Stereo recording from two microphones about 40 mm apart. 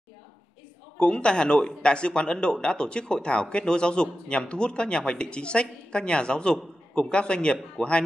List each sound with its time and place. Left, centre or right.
0.9 s speech: left